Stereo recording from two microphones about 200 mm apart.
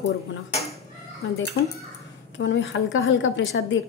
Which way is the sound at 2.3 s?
70° left (ahead or behind).